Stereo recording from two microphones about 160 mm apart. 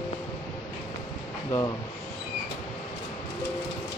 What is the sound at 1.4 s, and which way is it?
Speech, 20° left (ahead or behind).